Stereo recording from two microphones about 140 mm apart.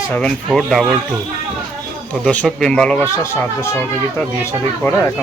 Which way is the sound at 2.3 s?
10° left (ahead or behind).